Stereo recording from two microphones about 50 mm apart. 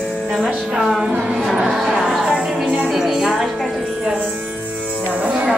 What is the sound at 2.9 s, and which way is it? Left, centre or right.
Music, centre.